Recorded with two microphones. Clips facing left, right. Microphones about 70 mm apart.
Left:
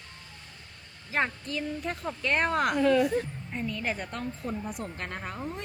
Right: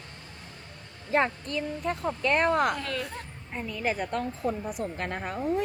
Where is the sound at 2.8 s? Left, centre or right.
Centre.